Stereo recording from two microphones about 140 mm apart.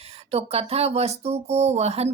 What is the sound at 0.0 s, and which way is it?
A woman's voice, 45° right (ahead or behind).